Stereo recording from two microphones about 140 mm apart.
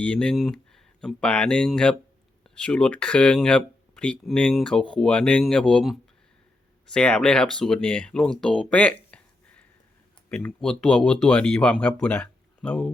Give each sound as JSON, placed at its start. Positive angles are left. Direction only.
{"t": 0.0, "sound": "speech", "side_deg": 5}